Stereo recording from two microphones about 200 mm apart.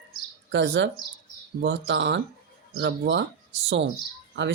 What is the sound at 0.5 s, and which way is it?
Speech, 60° right (ahead or behind).